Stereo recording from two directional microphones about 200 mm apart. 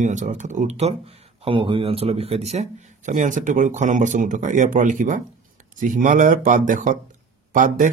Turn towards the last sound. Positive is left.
turn(degrees=-40)  # may be behind; listen again after turning